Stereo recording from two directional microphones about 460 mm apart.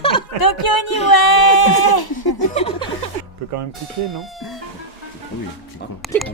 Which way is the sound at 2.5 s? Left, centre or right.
Centre.